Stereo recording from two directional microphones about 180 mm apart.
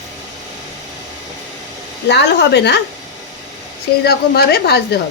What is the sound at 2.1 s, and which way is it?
Speech, 65° left (ahead or behind).